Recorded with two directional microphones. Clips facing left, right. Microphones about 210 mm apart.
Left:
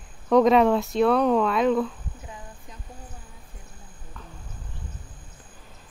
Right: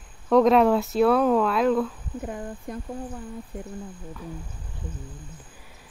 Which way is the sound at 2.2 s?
55° right (ahead or behind).